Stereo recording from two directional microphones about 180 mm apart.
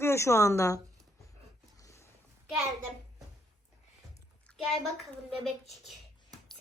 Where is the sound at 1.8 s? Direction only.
15° left (ahead or behind).